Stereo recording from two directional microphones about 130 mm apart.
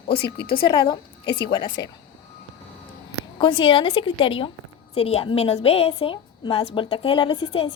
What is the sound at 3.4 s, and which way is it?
A woman's voice, 40° left (ahead or behind).